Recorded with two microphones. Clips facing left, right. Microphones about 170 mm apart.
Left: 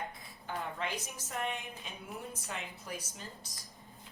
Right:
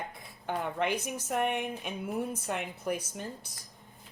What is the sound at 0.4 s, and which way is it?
A woman's voice, 65° right (ahead or behind).